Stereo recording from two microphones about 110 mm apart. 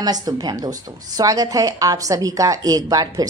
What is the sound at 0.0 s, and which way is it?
A woman's voice, 35° right (ahead or behind).